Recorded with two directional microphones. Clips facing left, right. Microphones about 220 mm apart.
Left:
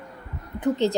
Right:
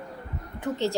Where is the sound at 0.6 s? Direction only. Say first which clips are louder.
Left 5 dB; 20° left (ahead or behind).